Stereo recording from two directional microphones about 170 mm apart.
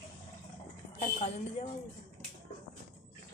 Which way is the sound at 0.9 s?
40° left (ahead or behind).